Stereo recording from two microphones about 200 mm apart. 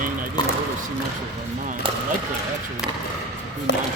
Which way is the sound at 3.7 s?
60° left (ahead or behind).